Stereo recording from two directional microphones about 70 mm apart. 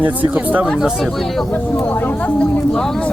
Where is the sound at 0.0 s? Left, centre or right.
Right.